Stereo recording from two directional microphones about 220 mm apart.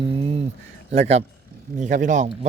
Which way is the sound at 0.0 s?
25° right (ahead or behind).